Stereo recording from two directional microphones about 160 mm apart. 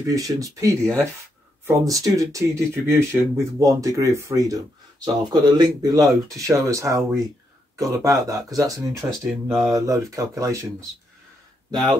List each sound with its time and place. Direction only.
0.1 s speech: 20° right (ahead or behind)
9.2 s speech: centre (ahead or behind)
9.7 s speech: 20° right (ahead or behind)